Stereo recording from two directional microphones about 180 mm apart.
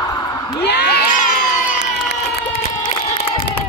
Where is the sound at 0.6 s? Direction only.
65° left (ahead or behind).